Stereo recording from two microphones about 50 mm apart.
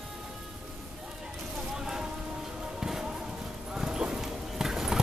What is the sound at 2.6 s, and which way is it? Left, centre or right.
Music, centre.